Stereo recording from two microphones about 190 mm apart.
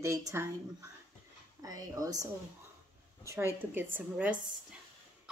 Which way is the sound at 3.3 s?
10° right (ahead or behind).